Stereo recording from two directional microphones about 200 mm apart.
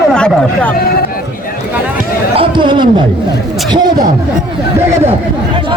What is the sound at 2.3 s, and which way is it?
Speech, 25° right (ahead or behind).